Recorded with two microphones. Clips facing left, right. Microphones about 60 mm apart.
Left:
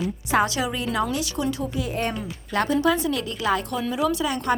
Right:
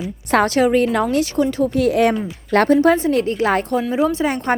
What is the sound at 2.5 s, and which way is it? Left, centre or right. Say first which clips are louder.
Speech: right 9 dB; right.